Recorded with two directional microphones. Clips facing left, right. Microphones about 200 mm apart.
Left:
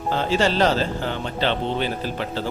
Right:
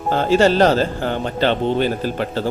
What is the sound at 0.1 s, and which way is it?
Speech, 45° right (ahead or behind).